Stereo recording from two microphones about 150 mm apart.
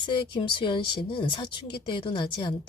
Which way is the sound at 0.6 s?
30° left (ahead or behind).